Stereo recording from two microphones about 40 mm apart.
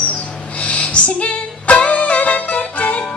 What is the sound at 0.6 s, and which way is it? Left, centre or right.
Music, left.